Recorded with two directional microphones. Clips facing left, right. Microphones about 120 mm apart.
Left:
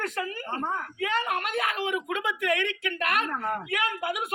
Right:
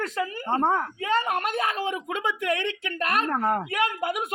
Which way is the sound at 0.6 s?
65° right (ahead or behind).